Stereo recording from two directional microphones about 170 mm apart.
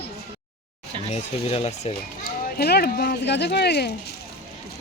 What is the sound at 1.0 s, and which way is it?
Speech, 35° left (ahead or behind).